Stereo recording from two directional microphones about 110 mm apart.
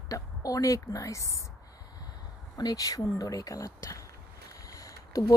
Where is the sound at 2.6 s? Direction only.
35° left (ahead or behind).